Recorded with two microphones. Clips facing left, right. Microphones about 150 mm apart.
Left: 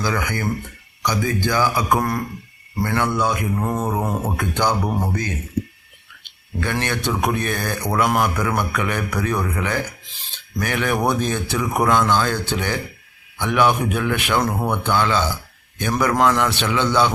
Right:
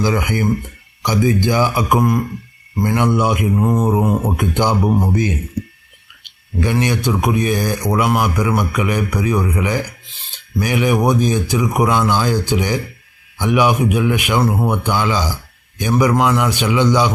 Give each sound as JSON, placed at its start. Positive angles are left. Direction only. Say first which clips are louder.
{"t": 0.0, "sound": "speech", "louder": "right 6 dB", "side_deg": -20}
{"t": 6.6, "sound": "speech", "louder": "right 6 dB", "side_deg": -15}
{"t": 10.1, "sound": "a sound", "louder": "right 5 dB", "side_deg": 0}
{"t": 10.6, "sound": "speech", "louder": "right 5 dB", "side_deg": -10}